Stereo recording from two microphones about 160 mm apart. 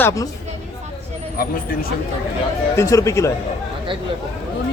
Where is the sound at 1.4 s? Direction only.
65° left (ahead or behind).